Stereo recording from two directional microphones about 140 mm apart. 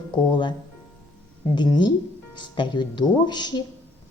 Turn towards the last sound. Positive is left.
turn(degrees=30)  # may be behind; listen again after turning